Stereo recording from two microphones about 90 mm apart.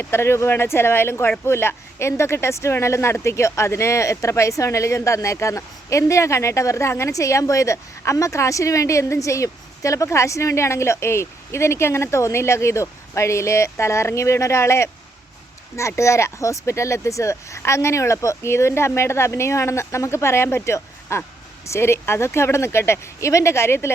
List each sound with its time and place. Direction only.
0.0 s speech: 30° left (ahead or behind)